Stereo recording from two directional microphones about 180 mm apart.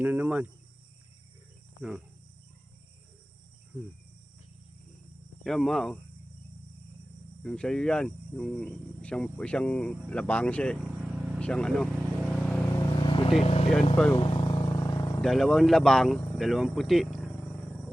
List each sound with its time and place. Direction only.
0.0 s cricket: 10° right (ahead or behind)
5.4 s speech: centre (ahead or behind)
7.4 s speech: 5° left (ahead or behind)
11.3 s vehicle: 5° left (ahead or behind)
13.0 s vehicle: 30° left (ahead or behind)
13.4 s speech: 35° left (ahead or behind)
13.9 s speech: 5° left (ahead or behind)
14.2 s vehicle: 25° left (ahead or behind)
15.2 s speech: centre (ahead or behind)